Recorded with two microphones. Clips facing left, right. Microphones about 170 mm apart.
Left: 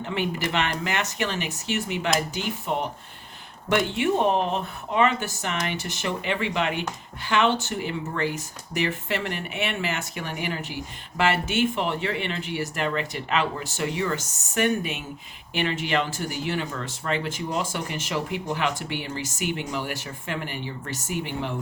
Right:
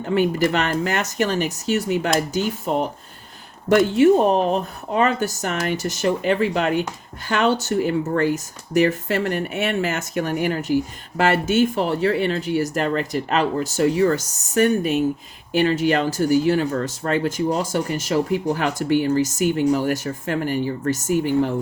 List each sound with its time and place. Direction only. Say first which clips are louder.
0.0 s speech: right 9 dB; 45° right (ahead or behind)